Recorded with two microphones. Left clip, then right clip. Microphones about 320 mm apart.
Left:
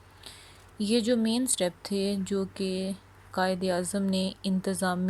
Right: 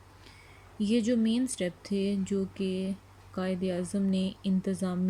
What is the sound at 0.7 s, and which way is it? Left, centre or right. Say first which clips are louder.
Speech: left 2 dB; centre.